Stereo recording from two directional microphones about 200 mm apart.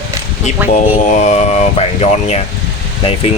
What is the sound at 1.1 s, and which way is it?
Speech, 35° left (ahead or behind).